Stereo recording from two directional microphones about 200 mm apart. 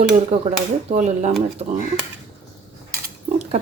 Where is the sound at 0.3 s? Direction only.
30° right (ahead or behind).